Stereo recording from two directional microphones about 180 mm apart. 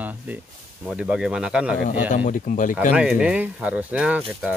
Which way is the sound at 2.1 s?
45° left (ahead or behind).